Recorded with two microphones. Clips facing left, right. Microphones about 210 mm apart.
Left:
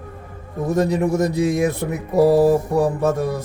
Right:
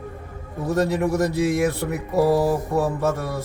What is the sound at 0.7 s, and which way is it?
Mantra, 15° left (ahead or behind).